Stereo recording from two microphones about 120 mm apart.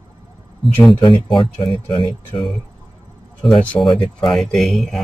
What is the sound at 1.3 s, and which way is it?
Speech, 45° left (ahead or behind).